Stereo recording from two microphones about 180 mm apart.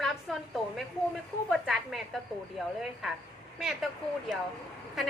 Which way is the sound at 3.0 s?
Centre (ahead or behind).